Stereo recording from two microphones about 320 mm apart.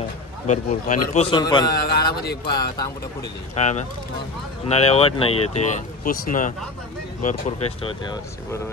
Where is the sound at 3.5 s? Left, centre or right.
Left.